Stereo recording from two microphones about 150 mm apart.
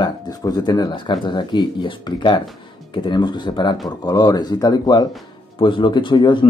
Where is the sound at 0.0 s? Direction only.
25° left (ahead or behind).